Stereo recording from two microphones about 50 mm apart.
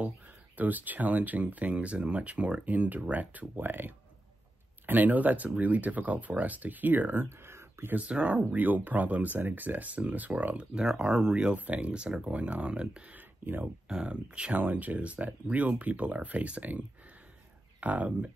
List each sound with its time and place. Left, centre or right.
0.6 s speech: right
7.2 s a sound: right
7.9 s speech: right
10.7 s speech: centre
11.5 s speech: right
13.1 s a sound: right
13.8 s speech: right
14.5 s speech: right